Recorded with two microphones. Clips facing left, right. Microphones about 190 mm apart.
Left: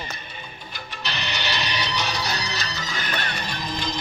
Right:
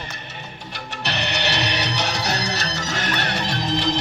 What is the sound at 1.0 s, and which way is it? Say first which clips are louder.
Music: right 5 dB; 70° right (ahead or behind).